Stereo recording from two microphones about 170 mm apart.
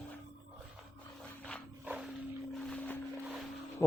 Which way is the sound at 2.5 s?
5° left (ahead or behind).